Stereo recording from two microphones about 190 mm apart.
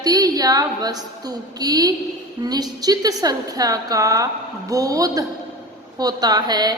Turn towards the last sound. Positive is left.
turn(degrees=-20)  # may be behind; listen again after turning